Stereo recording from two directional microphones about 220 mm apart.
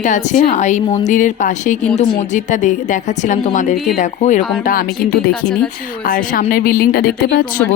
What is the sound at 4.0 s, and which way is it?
Speech, 35° left (ahead or behind).